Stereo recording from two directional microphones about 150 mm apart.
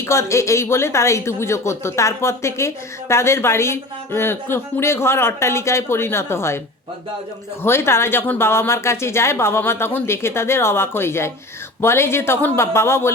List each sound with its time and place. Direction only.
0.0 s speech: 20° left (ahead or behind)
7.6 s speech: 15° left (ahead or behind)